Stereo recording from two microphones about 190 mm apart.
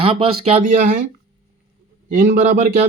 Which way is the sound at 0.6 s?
45° right (ahead or behind).